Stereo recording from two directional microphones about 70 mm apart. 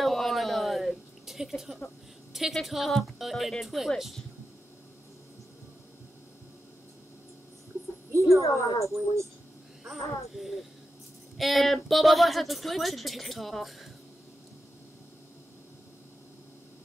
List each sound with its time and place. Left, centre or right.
0.0 s a sound: centre
2.3 s speech: centre
8.1 s a sound: right
8.4 s speech: left
8.9 s speech: right
9.8 s speech: centre